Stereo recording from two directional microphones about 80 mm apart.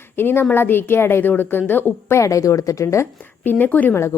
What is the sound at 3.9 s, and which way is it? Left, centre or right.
Speech, left.